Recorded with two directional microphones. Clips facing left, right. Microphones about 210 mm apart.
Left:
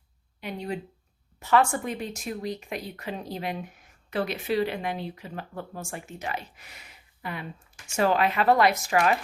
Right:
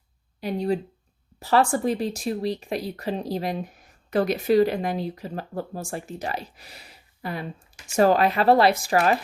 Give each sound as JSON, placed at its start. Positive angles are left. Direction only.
{"t": 0.3, "sound": "speech", "side_deg": -35}